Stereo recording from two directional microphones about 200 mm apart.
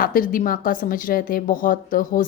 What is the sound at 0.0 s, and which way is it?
A woman's voice, 45° left (ahead or behind).